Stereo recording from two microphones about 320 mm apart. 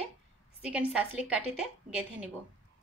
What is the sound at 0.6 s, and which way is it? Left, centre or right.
A woman's voice, centre.